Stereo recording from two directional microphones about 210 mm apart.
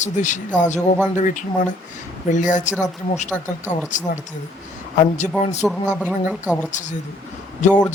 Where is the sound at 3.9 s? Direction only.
35° left (ahead or behind).